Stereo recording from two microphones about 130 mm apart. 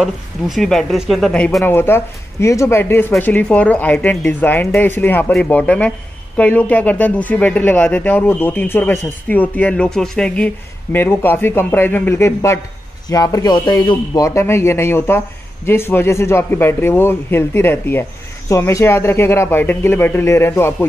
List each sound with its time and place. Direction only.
0.0 s speech: centre (ahead or behind); by 20.7 s 20° left (ahead or behind)